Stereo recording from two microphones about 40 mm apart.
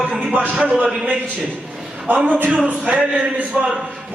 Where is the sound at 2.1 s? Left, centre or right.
Right.